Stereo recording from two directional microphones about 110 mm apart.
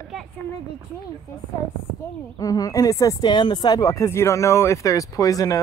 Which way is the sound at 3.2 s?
45° left (ahead or behind).